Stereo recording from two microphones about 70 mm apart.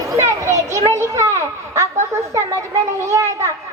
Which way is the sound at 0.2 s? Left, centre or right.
Right.